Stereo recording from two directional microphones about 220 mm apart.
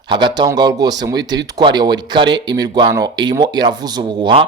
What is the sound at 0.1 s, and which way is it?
Speech, 20° right (ahead or behind).